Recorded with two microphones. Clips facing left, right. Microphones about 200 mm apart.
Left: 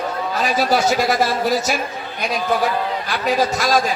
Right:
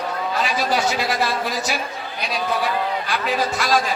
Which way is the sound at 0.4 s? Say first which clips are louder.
Left 6 dB; 40° left (ahead or behind).